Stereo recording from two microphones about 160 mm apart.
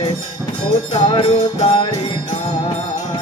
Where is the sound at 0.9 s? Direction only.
45° left (ahead or behind).